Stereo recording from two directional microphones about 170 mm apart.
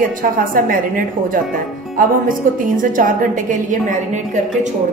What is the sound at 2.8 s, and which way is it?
A woman's voice, 50° right (ahead or behind).